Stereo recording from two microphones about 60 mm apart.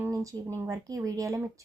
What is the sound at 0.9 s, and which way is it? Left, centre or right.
Speech, right.